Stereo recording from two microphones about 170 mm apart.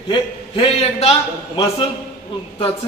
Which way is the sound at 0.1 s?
30° left (ahead or behind).